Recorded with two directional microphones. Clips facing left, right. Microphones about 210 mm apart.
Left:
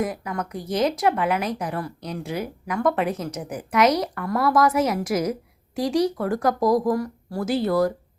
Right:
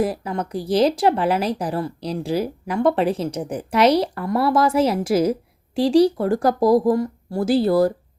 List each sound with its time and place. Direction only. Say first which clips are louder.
0.0 s speech: right 4 dB; 30° right (ahead or behind)